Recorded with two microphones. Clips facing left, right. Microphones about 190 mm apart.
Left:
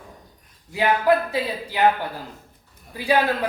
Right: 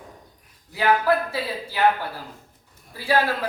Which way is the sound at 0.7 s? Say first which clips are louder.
Left 1 dB; 15° left (ahead or behind).